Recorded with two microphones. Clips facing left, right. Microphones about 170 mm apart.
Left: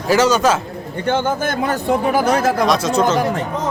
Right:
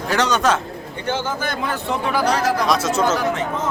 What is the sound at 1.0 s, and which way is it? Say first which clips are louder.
Speech: left 5 dB; 55° left (ahead or behind).